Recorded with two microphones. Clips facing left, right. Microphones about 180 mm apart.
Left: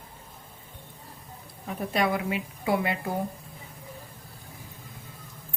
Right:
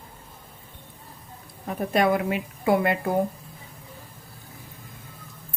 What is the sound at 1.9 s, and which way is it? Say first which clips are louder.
A woman's voice: right 5 dB; 50° right (ahead or behind).